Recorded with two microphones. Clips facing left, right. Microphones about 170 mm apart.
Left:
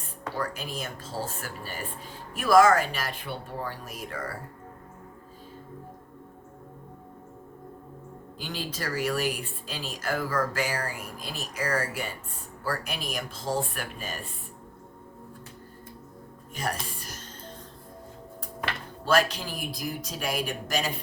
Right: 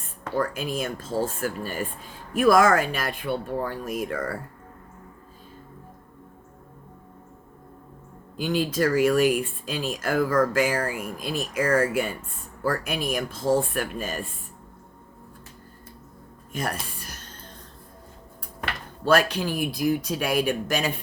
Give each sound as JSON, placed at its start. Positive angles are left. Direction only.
{"t": 0.3, "sound": "speech", "side_deg": -50}
{"t": 8.4, "sound": "speech", "side_deg": -50}
{"t": 17.0, "sound": "music", "side_deg": -60}
{"t": 19.0, "sound": "speech", "side_deg": -60}